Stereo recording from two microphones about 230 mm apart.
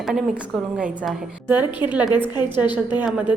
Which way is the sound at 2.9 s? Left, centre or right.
Centre.